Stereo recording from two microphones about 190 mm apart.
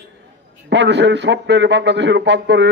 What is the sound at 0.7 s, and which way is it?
A man's voice, 70° right (ahead or behind).